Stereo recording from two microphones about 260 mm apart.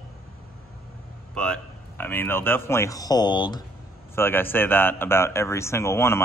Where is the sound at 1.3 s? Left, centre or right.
Centre.